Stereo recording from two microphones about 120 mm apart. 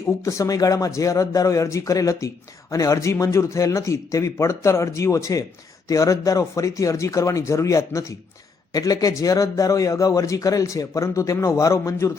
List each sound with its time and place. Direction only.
0.3 s a man's voice: 30° left (ahead or behind)